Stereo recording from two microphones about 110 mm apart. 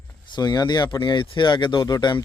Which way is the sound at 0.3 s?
40° left (ahead or behind).